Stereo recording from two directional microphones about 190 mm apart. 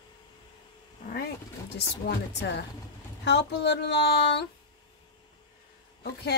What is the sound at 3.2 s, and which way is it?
Speech, 65° left (ahead or behind).